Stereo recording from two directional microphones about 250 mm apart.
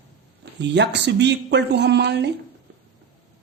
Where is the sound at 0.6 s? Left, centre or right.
Right.